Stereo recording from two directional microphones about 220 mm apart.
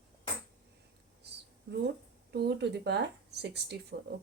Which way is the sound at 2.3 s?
50° right (ahead or behind).